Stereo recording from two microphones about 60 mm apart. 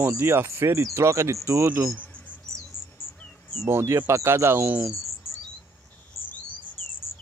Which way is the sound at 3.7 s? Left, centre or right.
Right.